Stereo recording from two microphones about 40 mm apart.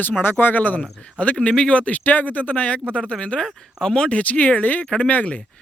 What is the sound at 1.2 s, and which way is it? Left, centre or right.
Speech, left.